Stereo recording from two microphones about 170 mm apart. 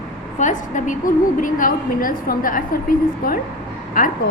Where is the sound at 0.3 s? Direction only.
50° left (ahead or behind).